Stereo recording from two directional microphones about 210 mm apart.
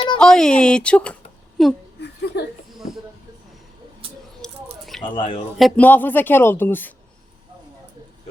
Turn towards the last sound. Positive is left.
turn(degrees=10)  # may be behind; listen again after turning